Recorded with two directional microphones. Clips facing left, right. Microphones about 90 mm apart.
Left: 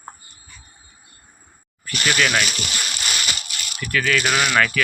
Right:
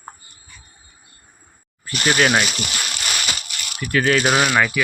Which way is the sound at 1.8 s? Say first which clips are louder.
Right 3 dB; 25° right (ahead or behind).